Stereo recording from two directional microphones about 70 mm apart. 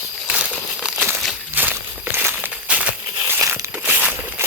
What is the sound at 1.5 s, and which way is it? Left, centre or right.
Walk, right.